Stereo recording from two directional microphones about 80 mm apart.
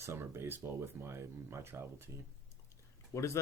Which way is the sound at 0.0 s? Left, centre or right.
Right.